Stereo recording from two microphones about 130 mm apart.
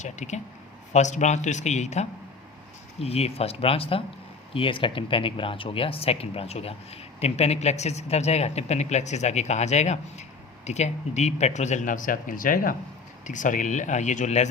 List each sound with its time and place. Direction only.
0.0 s speech: 65° left (ahead or behind); by 12.7 s 90° left
13.2 s speech: 80° left; by 14.5 s 65° left (ahead or behind)